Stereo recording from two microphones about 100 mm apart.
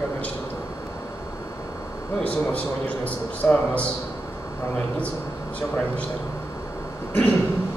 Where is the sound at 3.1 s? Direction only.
15° left (ahead or behind).